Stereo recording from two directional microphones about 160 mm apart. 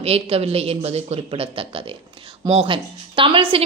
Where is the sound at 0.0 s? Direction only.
40° right (ahead or behind).